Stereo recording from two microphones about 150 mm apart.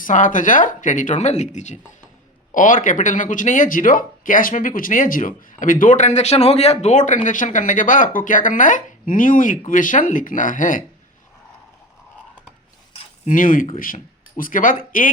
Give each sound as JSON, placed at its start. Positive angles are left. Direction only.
{"t": 0.0, "sound": "speech", "side_deg": 60}
{"t": 13.2, "sound": "speech", "side_deg": 60}